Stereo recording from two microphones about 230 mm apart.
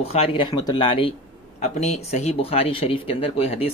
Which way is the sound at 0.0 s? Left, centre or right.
Left.